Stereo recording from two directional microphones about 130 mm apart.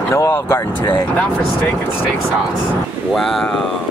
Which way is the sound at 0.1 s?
20° left (ahead or behind).